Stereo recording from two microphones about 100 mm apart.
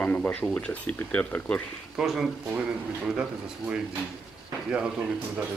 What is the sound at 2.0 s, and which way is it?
Speech, 5° right (ahead or behind).